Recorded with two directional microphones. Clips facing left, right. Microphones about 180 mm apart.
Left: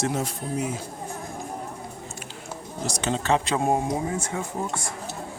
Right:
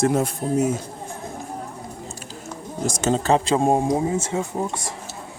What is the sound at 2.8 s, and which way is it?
Speech, 45° right (ahead or behind).